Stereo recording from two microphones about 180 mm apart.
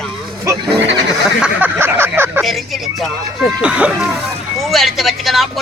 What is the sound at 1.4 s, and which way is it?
Speech, 10° right (ahead or behind).